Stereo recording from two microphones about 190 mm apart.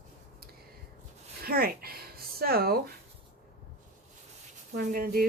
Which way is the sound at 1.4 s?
55° right (ahead or behind).